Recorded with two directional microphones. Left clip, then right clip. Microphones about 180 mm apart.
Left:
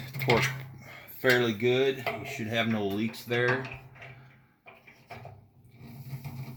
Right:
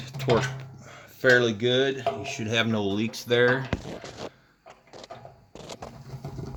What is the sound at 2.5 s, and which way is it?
Speech, 50° right (ahead or behind).